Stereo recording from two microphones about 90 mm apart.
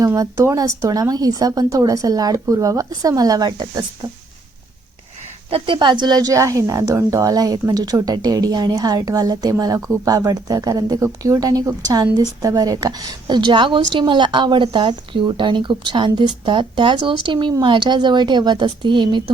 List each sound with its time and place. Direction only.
0.0 s speech: 40° right (ahead or behind)
5.5 s speech: 85° right; by 9.7 s 45° right (ahead or behind)
9.7 s speech: 30° right (ahead or behind); by 19.2 s 60° right (ahead or behind)